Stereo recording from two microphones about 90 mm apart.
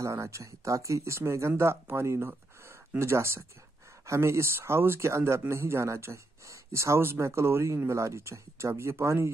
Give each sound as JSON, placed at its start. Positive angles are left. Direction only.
{"t": 0.0, "sound": "speech", "side_deg": -35}